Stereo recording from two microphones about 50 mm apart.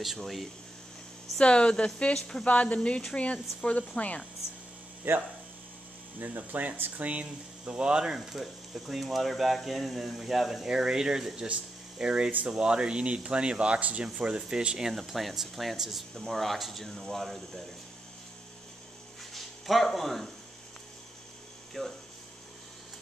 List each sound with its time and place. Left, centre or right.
0.2 s speech: centre
1.4 s a woman's voice: centre
2.4 s a woman's voice: left
5.1 s speech: right; by 14.9 s centre
14.9 s speech: centre
19.3 s a sound: centre
21.8 s speech: centre